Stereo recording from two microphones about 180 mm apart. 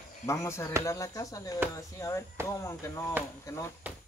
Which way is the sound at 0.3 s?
15° left (ahead or behind).